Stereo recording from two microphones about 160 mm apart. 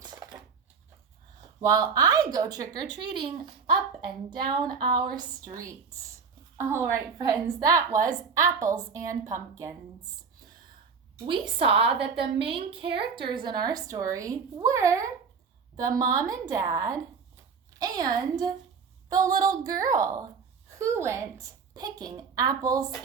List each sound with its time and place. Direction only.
0.0 s a sound: 25° right (ahead or behind)
1.6 s a woman's voice: 25° right (ahead or behind)
11.3 s a woman's voice: 35° right (ahead or behind); by 15.1 s 20° right (ahead or behind)
16.2 s a woman's voice: 20° right (ahead or behind)